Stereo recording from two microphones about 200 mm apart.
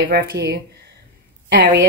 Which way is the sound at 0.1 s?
50° right (ahead or behind).